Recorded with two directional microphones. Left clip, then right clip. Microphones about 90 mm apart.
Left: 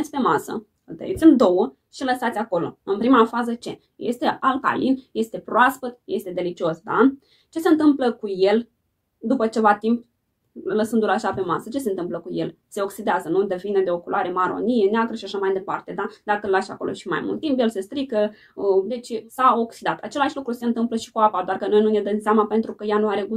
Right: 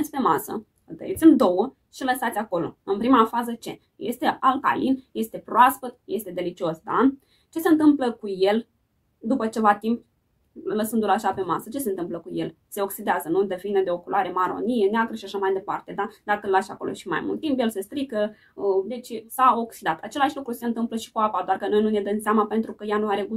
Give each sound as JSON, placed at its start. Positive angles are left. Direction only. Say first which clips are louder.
{"t": 0.1, "sound": "speech", "louder": "left 3 dB", "side_deg": -20}